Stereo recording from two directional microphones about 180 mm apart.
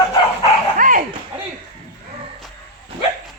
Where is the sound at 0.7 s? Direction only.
50° right (ahead or behind).